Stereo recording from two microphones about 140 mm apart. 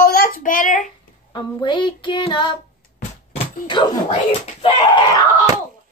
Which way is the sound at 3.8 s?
35° left (ahead or behind).